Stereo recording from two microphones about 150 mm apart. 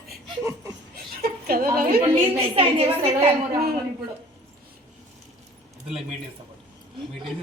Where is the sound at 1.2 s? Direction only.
80° right.